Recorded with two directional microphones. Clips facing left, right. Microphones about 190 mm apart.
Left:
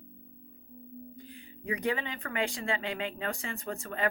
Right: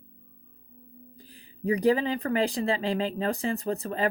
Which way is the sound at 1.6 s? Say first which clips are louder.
Right 9 dB; 35° right (ahead or behind).